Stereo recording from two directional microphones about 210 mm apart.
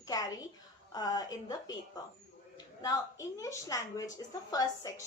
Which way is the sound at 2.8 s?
15° left (ahead or behind).